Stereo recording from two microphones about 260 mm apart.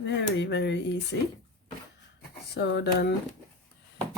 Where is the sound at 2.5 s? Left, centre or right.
Left.